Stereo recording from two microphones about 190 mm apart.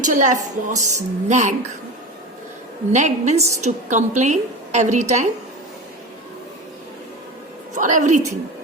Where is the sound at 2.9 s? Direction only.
40° right (ahead or behind).